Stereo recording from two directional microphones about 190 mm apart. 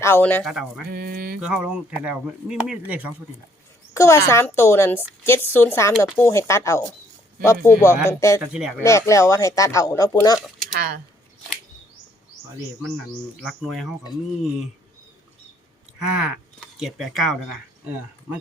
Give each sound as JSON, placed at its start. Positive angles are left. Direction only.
{"t": 0.0, "sound": "a woman's voice", "side_deg": 10}
{"t": 0.9, "sound": "mantra", "side_deg": -50}
{"t": 1.4, "sound": "speech", "side_deg": -5}
{"t": 3.9, "sound": "a woman's voice", "side_deg": 15}
{"t": 8.4, "sound": "speech", "side_deg": -5}
{"t": 8.8, "sound": "a woman's voice", "side_deg": 15}
{"t": 10.8, "sound": "mantra", "side_deg": -50}
{"t": 13.4, "sound": "speech", "side_deg": 0}
{"t": 16.0, "sound": "speech", "side_deg": -5}